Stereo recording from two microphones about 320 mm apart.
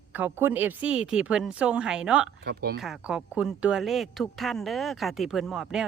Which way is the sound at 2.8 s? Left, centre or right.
Centre.